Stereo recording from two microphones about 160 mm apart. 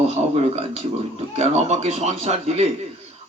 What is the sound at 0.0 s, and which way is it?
Speech, 40° right (ahead or behind).